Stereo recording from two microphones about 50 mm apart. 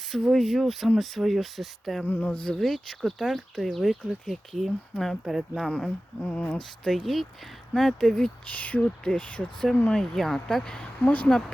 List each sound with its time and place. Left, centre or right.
0.1 s speech: centre
2.0 s speech: left
2.5 s speech: centre
6.1 s speech: left
6.6 s speech: centre
8.5 s speech: left
8.8 s speech: centre
9.9 s speech: centre
11.0 s speech: left